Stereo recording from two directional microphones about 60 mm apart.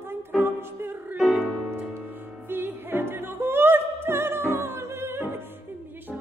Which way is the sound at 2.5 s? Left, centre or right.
Right.